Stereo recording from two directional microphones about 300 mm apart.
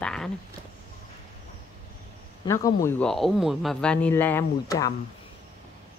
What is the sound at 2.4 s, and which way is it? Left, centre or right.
Speech, centre.